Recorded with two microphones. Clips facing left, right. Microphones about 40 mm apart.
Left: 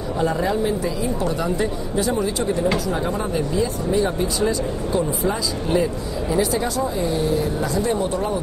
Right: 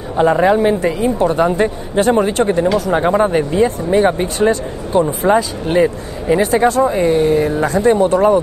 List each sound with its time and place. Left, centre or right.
0.2 s speech: right